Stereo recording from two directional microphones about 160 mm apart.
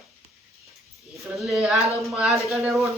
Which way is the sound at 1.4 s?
Centre (ahead or behind).